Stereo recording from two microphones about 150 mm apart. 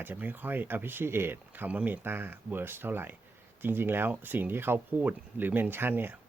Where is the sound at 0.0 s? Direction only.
10° right (ahead or behind).